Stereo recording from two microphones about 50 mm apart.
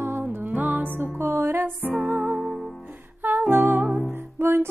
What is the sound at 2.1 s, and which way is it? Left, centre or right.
Music, right.